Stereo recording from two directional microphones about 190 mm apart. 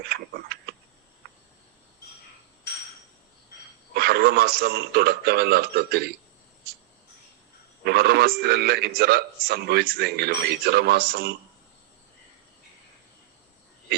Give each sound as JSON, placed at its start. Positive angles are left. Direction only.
{"t": 0.1, "sound": "a man's voice", "side_deg": -60}
{"t": 3.9, "sound": "a man's voice", "side_deg": -55}
{"t": 7.9, "sound": "a man's voice", "side_deg": -60}